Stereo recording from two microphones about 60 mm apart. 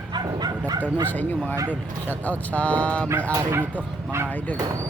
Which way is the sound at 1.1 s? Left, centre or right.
Left.